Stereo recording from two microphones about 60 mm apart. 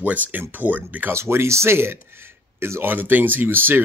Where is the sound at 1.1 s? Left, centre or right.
Right.